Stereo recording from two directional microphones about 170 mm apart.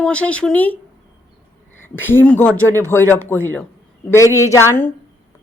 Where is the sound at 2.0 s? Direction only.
10° left (ahead or behind).